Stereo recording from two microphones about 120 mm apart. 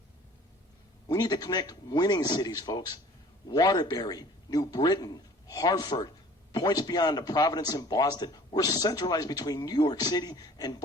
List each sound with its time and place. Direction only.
1.0 s speech: 35° left (ahead or behind)